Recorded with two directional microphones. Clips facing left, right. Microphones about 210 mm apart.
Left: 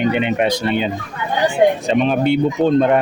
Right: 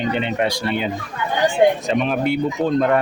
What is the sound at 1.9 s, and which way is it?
Speech, 25° left (ahead or behind).